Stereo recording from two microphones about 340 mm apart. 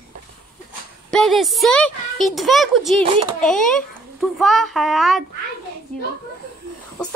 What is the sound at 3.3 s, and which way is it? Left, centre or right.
Speech, centre.